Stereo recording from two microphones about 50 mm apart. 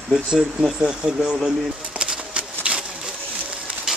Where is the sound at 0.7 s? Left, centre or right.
Centre.